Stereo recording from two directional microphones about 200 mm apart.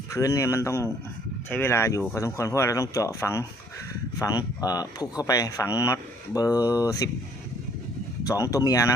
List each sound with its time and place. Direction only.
0.1 s speech: 15° left (ahead or behind)
6.6 s speech: 10° right (ahead or behind)
6.8 s speech: 15° left (ahead or behind)
8.3 s speech: 15° left (ahead or behind)